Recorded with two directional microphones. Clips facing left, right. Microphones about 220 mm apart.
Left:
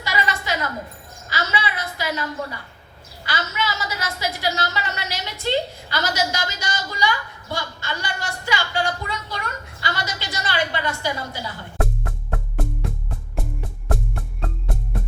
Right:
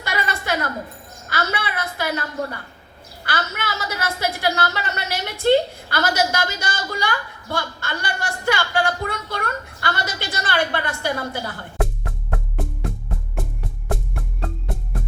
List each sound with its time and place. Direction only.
0.0 s music: 55° right (ahead or behind)
1.3 s a woman's voice: 55° right (ahead or behind)
12.6 s music: centre (ahead or behind)